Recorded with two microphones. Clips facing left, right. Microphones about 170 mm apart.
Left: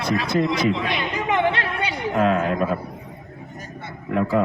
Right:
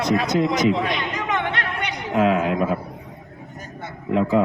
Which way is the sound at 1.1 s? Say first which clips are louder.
Left 3 dB; 30° left (ahead or behind).